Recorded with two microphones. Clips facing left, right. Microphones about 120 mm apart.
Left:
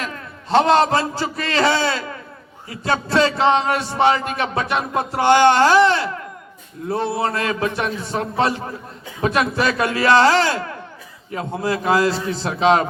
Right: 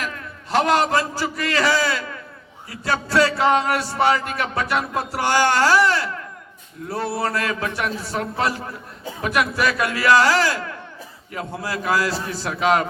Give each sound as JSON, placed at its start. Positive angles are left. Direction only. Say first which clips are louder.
{"t": 0.5, "sound": "a man's voice", "louder": "left 3 dB", "side_deg": 25}